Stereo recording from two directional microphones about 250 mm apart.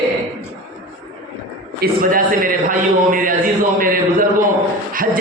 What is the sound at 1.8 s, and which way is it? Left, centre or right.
A man's voice, right.